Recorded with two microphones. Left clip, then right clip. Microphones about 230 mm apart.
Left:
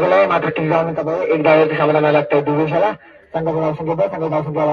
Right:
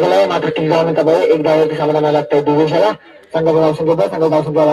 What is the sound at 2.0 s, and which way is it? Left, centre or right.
A man's voice, right.